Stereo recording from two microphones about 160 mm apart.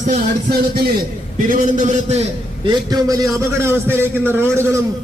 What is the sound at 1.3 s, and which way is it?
Speech, 55° right (ahead or behind).